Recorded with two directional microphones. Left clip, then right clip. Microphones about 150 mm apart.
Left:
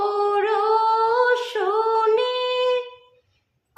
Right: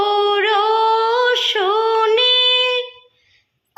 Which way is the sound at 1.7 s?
20° right (ahead or behind).